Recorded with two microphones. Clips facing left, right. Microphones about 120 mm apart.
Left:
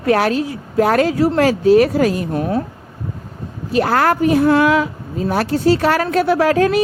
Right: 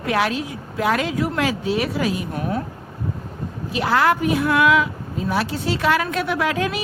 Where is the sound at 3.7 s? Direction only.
45° left (ahead or behind).